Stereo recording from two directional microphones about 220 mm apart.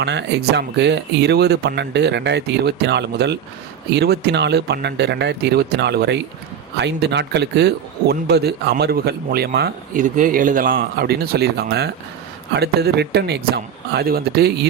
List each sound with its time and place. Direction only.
0.0 s speech: 50° right (ahead or behind)